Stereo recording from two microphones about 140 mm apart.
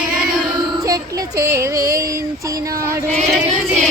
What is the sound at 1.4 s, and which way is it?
Music, 20° right (ahead or behind).